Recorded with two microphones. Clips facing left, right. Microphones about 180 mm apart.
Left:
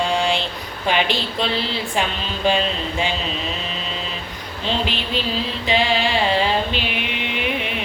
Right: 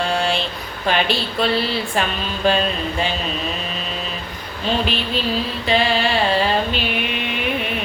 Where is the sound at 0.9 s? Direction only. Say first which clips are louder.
Right 1 dB; 15° left (ahead or behind).